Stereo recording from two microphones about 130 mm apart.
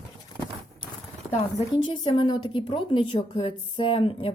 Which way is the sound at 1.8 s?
40° left (ahead or behind).